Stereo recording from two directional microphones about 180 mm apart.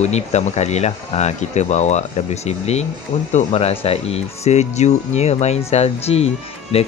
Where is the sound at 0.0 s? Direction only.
40° left (ahead or behind).